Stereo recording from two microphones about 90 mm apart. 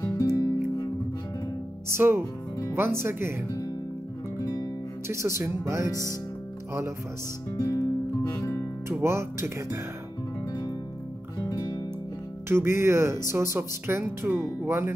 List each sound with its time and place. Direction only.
0.0 s music: 40° left (ahead or behind)
1.9 s speech: 25° right (ahead or behind)
5.0 s speech: 30° right (ahead or behind)
7.5 s music: 40° left (ahead or behind)
9.0 s speech: 30° right (ahead or behind)
11.3 s music: 45° left (ahead or behind)
12.4 s speech: 30° right (ahead or behind)